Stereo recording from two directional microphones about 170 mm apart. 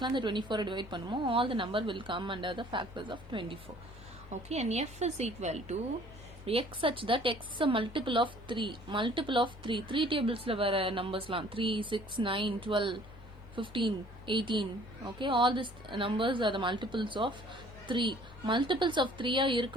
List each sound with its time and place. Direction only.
0.0 s a woman's voice: 25° right (ahead or behind)
4.3 s a woman's voice: 40° right (ahead or behind)